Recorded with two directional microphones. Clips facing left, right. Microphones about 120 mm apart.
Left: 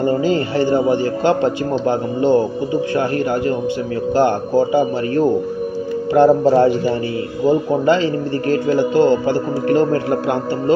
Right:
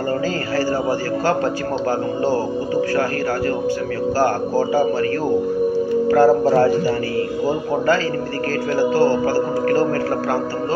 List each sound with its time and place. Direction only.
0.3 s a man's voice: 25° left (ahead or behind)
4.2 s a man's voice: 25° left (ahead or behind)
8.5 s a man's voice: 20° left (ahead or behind)